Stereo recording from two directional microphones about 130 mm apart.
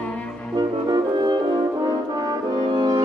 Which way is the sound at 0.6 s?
30° right (ahead or behind).